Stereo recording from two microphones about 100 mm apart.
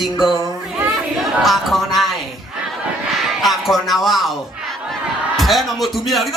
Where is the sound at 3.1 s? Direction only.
Centre (ahead or behind).